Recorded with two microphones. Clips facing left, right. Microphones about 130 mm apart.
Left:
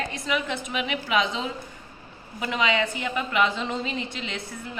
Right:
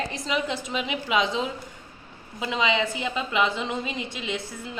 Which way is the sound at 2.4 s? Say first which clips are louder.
Even; 20° right (ahead or behind).